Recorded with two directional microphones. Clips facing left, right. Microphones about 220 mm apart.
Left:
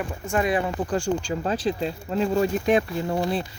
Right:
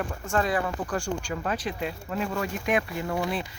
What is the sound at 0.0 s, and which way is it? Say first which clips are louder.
Speech: left 2 dB; 10° left (ahead or behind).